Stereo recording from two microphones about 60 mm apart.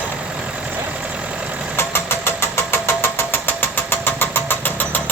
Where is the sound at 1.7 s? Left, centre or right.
Left.